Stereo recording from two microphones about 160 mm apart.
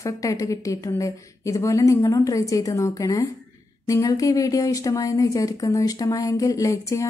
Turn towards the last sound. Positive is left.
turn(degrees=20)  # may be behind; listen again after turning